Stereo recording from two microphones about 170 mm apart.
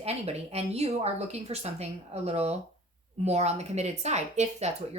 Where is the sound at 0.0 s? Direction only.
40° right (ahead or behind).